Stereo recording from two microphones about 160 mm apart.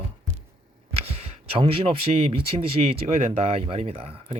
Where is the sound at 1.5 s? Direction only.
35° right (ahead or behind).